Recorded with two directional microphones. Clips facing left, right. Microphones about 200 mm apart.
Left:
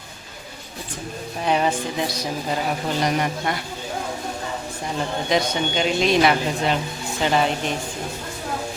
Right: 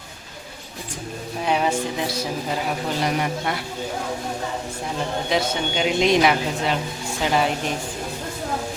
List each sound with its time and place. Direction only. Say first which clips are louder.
1.5 s speech: left 1 dB; 5° right (ahead or behind)
5.3 s speech: left 2 dB; 5° right (ahead or behind)
6.0 s a woman's voice: right 1 dB; 20° right (ahead or behind)
6.7 s speech: left 1 dB; 5° right (ahead or behind)